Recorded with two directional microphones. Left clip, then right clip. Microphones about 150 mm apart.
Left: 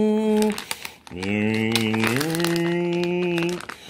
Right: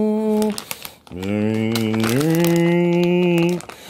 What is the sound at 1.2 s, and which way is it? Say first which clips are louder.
Crumpling: right 2 dB; 20° right (ahead or behind).